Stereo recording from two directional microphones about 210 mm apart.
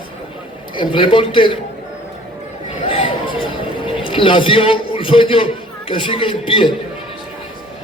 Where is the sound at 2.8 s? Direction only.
25° left (ahead or behind).